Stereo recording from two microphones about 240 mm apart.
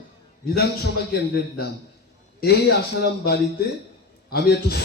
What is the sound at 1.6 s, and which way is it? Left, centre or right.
A man's voice, left.